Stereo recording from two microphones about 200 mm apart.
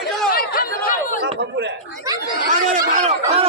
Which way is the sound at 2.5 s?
40° right (ahead or behind).